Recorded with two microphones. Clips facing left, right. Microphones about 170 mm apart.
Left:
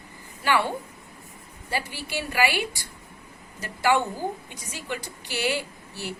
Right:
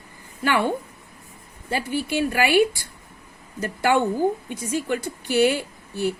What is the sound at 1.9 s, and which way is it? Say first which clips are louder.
A woman's voice: right 8 dB; 55° right (ahead or behind).